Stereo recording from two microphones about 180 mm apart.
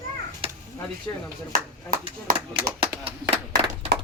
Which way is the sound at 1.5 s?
55° right (ahead or behind).